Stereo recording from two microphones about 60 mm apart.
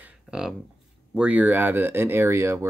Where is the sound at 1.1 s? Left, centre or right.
Right.